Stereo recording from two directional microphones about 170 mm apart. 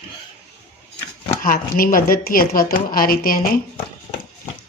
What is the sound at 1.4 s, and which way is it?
A woman's voice, 55° left (ahead or behind).